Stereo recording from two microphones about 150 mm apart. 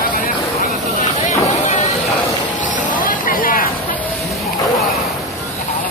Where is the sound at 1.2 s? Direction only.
50° left (ahead or behind).